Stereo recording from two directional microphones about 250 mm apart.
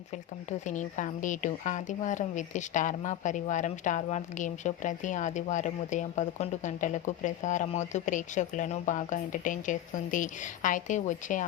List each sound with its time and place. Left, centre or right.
0.6 s speech: left